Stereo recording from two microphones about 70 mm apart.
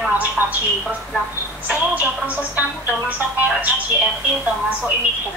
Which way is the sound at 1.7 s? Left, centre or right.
Right.